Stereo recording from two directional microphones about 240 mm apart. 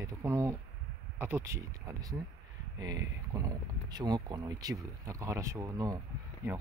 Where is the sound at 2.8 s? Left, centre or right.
Centre.